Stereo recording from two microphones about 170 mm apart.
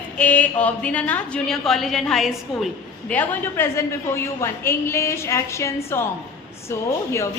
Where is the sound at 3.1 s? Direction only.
10° left (ahead or behind).